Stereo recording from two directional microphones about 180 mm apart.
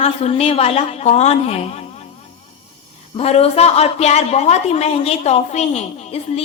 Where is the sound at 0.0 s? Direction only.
35° left (ahead or behind).